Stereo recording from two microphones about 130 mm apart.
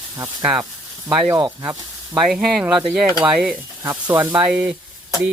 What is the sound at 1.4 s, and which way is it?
Sizzle, 30° right (ahead or behind).